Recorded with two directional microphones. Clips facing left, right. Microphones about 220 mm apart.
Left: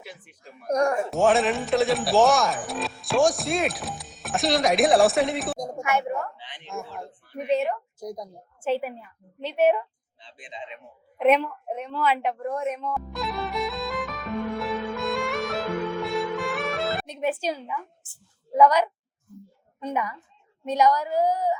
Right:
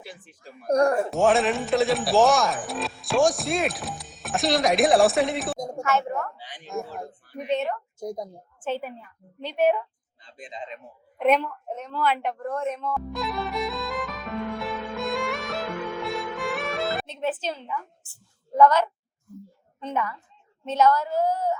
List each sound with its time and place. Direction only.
0.7 s speech: 35° right (ahead or behind)
1.1 s speech: centre (ahead or behind)
5.8 s a woman's voice: 15° left (ahead or behind)
6.4 s speech: 40° right (ahead or behind)
7.3 s a woman's voice: 10° left (ahead or behind)
7.9 s a woman's voice: 25° right (ahead or behind)
8.6 s a woman's voice: 10° left (ahead or behind)
10.2 s speech: 40° right (ahead or behind)
11.2 s a woman's voice: 5° left (ahead or behind)
13.1 s music: centre (ahead or behind)
17.1 s a woman's voice: 10° left (ahead or behind)